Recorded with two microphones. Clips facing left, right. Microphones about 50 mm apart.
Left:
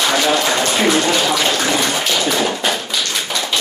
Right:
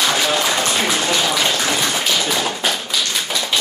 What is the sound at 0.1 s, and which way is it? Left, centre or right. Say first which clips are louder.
Speech: left 2 dB; centre.